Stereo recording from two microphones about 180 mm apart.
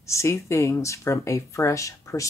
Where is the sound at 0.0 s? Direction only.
15° left (ahead or behind).